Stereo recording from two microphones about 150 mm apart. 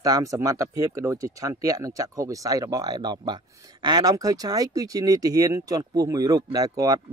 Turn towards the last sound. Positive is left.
turn(degrees=-25)  # may be behind; listen again after turning